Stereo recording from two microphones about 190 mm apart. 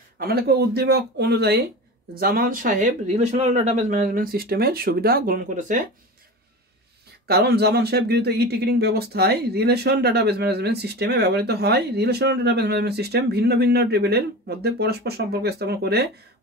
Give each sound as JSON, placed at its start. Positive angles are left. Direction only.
{"t": 0.2, "sound": "speech", "side_deg": -55}
{"t": 7.2, "sound": "speech", "side_deg": -55}